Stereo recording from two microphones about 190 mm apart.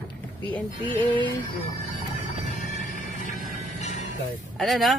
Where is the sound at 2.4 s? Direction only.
40° left (ahead or behind).